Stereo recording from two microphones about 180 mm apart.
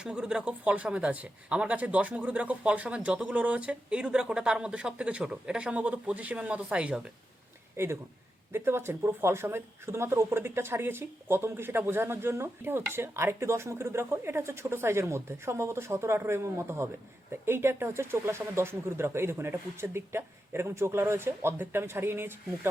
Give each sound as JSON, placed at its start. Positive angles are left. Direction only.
{"t": 0.0, "sound": "speech", "side_deg": -5}